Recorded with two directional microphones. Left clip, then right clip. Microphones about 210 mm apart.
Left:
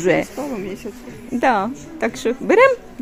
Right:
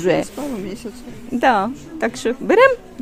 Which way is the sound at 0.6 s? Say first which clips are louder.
Left 1 dB; 50° right (ahead or behind).